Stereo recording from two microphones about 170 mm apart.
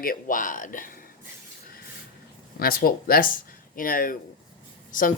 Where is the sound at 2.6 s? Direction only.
60° left (ahead or behind).